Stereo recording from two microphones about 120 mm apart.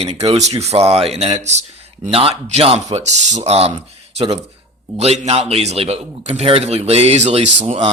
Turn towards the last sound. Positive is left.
turn(degrees=-60)  # may be behind; listen again after turning